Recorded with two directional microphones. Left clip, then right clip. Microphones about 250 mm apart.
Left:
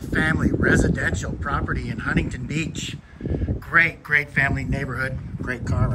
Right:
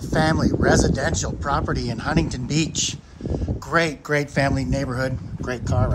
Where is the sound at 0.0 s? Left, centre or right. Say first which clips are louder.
Right 2 dB; centre.